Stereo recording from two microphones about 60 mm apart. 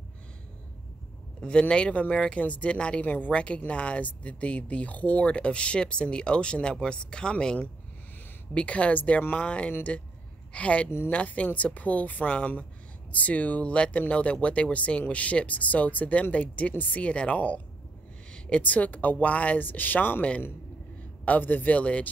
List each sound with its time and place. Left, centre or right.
1.4 s speech: centre